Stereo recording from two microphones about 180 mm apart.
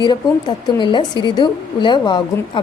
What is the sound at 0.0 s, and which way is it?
A woman's voice, 25° left (ahead or behind).